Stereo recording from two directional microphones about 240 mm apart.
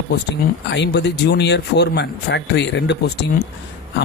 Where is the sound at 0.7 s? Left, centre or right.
Left.